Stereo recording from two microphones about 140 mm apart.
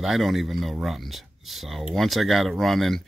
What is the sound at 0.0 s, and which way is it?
Speech, centre (ahead or behind).